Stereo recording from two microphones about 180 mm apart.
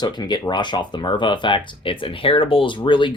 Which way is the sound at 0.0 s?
25° left (ahead or behind).